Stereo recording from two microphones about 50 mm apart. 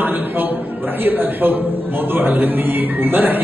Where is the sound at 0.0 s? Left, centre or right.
Right.